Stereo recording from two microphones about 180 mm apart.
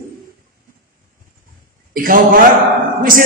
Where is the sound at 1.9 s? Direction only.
50° right (ahead or behind).